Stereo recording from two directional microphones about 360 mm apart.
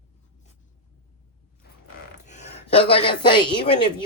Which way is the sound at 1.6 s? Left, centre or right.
Left.